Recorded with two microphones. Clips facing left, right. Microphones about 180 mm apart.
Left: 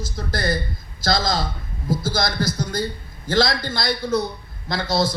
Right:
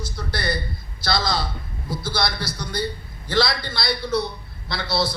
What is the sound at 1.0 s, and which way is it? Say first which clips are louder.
A man's voice: left 2 dB; 45° left (ahead or behind).